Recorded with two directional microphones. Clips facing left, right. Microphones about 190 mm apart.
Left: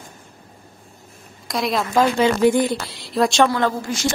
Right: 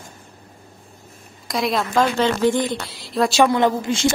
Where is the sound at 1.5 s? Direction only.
Centre (ahead or behind).